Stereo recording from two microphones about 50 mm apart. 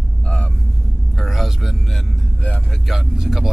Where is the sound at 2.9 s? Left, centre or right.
Centre.